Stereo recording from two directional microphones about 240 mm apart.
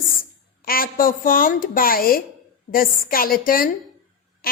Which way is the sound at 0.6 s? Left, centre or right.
Left.